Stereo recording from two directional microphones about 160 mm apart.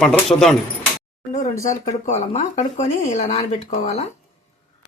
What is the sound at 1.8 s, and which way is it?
Speech, 45° left (ahead or behind).